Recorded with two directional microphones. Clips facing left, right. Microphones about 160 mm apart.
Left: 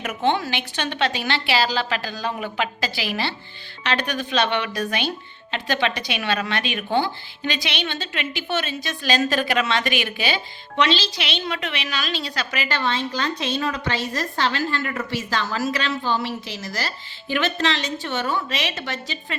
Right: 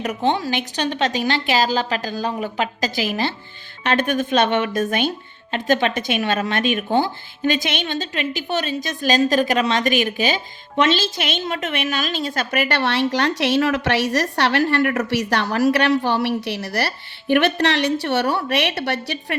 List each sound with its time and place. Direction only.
0.0 s a woman's voice: 35° right (ahead or behind); by 19.4 s 65° right (ahead or behind)